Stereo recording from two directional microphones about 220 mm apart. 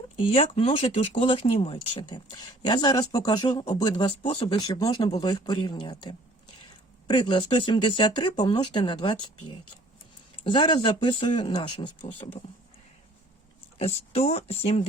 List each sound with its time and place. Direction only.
0.2 s speech: 25° left (ahead or behind)
10.4 s speech: 20° left (ahead or behind)
13.7 s speech: 30° left (ahead or behind)